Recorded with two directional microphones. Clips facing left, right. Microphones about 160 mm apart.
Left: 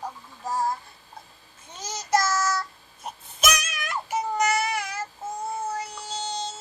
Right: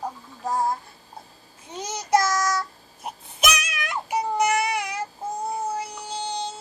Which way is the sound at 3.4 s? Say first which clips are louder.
Right 1 dB; 60° right (ahead or behind).